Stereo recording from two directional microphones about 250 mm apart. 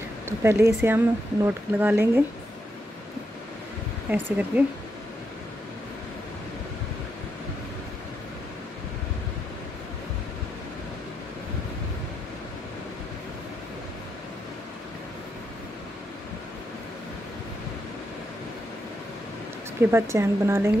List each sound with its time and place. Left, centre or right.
0.4 s speech: centre
4.1 s speech: centre
19.8 s speech: centre